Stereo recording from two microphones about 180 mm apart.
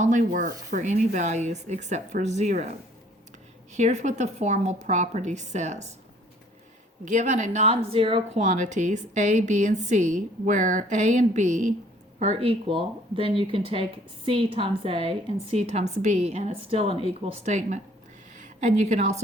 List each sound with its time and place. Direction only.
0.0 s speech: 45° right (ahead or behind)
7.0 s a woman's voice: 40° right (ahead or behind)